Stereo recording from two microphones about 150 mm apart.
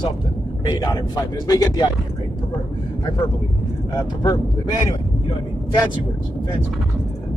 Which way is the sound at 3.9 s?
30° left (ahead or behind).